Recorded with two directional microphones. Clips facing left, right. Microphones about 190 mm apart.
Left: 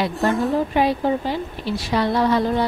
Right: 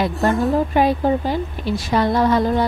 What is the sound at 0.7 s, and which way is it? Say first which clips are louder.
Speech: right 2 dB; 45° right (ahead or behind).